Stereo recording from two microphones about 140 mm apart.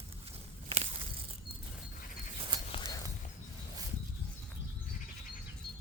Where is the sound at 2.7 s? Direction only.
35° left (ahead or behind).